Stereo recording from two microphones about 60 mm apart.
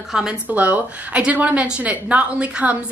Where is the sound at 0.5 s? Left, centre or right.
Right.